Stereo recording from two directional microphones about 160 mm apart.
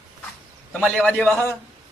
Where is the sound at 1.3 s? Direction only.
15° left (ahead or behind).